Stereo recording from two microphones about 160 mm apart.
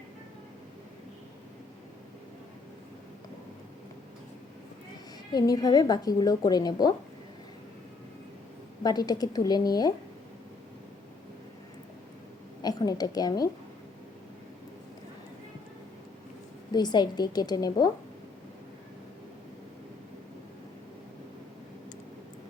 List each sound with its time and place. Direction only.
5.3 s speech: 25° left (ahead or behind)
8.8 s speech: 25° left (ahead or behind)
12.6 s a woman's voice: 25° left (ahead or behind)
16.7 s speech: 25° left (ahead or behind)